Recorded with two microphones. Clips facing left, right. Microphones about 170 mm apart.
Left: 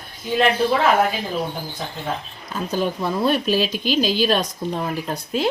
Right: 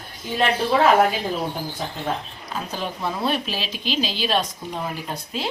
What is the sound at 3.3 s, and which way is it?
A woman's voice, 45° left (ahead or behind).